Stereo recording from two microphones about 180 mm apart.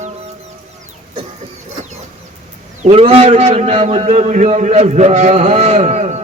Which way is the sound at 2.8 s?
35° right (ahead or behind).